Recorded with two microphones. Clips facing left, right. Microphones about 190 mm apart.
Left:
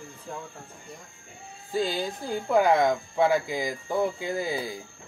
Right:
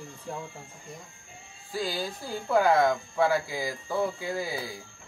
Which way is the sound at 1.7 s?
20° left (ahead or behind).